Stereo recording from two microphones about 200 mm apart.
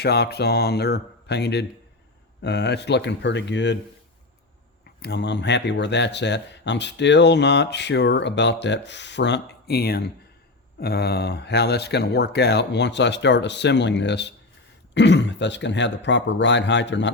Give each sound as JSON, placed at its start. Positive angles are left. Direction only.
{"t": 0.0, "sound": "speech", "side_deg": 55}
{"t": 4.9, "sound": "speech", "side_deg": 55}